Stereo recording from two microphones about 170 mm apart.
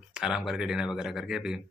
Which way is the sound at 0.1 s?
5° right (ahead or behind).